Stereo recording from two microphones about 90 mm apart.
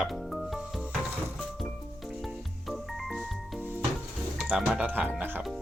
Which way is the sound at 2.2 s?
Centre (ahead or behind).